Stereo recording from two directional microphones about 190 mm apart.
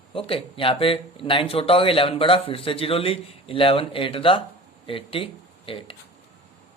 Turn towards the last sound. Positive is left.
turn(degrees=30)  # may be behind; listen again after turning